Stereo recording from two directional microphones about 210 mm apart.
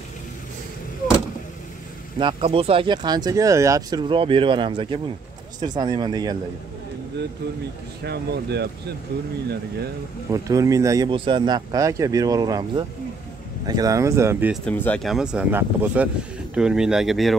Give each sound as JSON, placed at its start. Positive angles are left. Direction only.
{"t": 2.1, "sound": "speech", "side_deg": -25}
{"t": 8.0, "sound": "speech", "side_deg": -50}
{"t": 10.3, "sound": "speech", "side_deg": -15}
{"t": 14.5, "sound": "speech", "side_deg": 5}